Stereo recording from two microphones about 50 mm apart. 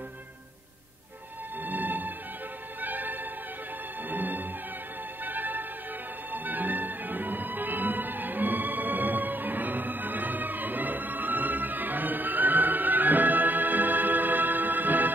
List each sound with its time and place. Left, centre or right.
1.6 s music: right